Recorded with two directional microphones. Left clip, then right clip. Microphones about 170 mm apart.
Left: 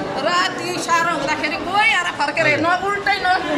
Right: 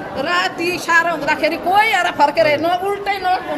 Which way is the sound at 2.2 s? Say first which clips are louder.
Right 4 dB; 30° right (ahead or behind).